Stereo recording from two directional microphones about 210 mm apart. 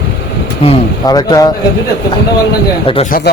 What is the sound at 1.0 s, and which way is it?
Speech, 20° left (ahead or behind).